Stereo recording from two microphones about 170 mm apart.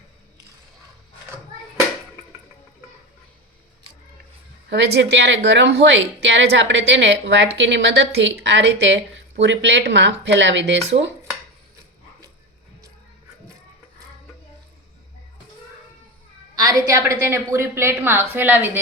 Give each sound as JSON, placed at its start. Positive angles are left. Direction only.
{"t": 4.7, "sound": "a woman's voice", "side_deg": -75}
{"t": 16.6, "sound": "a woman's voice", "side_deg": -20}